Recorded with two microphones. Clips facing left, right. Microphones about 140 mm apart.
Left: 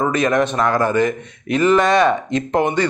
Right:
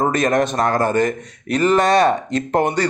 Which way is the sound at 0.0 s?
40° right (ahead or behind).